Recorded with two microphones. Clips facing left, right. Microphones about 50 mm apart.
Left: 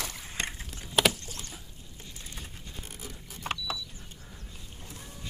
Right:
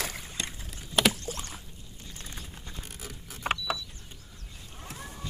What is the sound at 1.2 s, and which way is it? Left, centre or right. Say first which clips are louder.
Rowboat: right 6 dB; right.